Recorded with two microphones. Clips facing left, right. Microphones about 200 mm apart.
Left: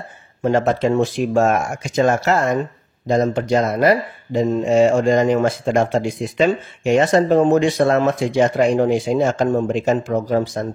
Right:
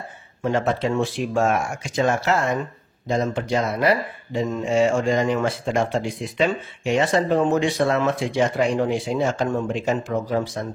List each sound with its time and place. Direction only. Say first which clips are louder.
0.4 s speech: left 5 dB; 40° left (ahead or behind)